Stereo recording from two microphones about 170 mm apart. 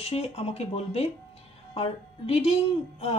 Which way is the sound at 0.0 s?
35° left (ahead or behind).